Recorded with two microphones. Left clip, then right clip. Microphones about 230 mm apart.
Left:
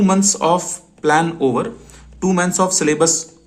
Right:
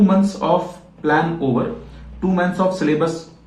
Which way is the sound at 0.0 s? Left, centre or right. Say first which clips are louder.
Left 2 dB; left.